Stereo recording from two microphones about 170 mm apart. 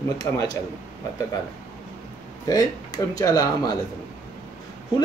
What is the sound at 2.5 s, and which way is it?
Speech, 20° left (ahead or behind).